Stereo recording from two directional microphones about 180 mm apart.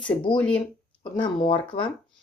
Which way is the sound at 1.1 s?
25° left (ahead or behind).